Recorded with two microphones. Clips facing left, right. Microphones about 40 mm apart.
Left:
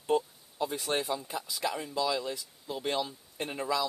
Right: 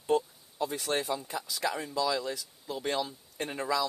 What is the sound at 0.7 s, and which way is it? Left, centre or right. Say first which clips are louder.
Speech: even; centre.